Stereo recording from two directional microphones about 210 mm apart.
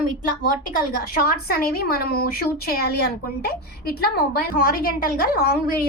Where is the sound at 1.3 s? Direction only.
45° left (ahead or behind).